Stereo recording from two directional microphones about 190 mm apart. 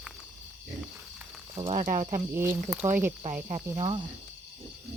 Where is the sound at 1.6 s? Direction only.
30° right (ahead or behind).